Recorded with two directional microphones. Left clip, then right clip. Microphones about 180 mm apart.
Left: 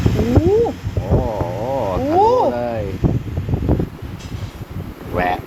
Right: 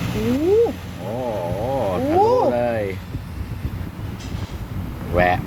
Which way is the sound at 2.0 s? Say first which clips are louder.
Left 3 dB; 5° right (ahead or behind).